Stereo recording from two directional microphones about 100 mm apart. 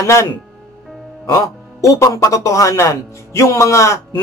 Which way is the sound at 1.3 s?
30° left (ahead or behind).